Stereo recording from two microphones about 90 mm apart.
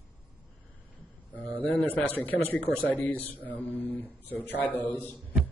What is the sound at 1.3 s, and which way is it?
A man's voice, 15° left (ahead or behind).